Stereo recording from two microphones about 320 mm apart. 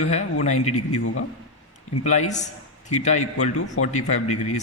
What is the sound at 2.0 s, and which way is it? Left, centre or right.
A man's voice, left.